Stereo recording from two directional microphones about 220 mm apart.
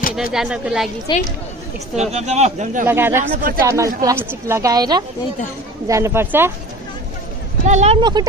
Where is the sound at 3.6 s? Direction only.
15° right (ahead or behind).